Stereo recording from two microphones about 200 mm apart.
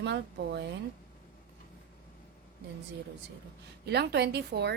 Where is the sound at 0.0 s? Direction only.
60° right (ahead or behind).